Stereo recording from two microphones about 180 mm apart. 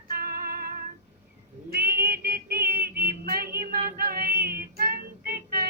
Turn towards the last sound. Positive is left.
turn(degrees=-55)  # may be behind; listen again after turning